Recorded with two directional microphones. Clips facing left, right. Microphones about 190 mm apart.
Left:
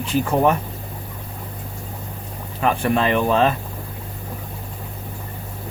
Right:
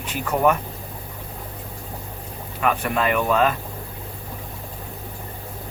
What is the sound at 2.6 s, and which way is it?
Speech, 30° left (ahead or behind).